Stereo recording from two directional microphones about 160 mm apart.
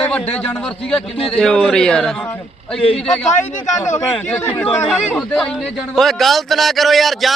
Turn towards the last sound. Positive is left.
turn(degrees=0)  # may be behind; listen again after turning